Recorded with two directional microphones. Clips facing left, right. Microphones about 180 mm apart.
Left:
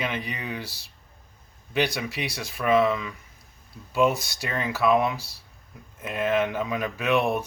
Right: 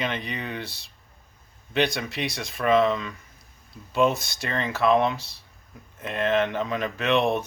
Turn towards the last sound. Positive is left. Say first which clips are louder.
# right 1 dB
turn(degrees=0)  # may be behind; listen again after turning